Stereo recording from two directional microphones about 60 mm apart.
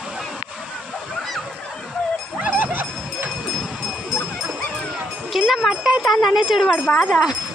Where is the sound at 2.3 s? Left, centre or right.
Right.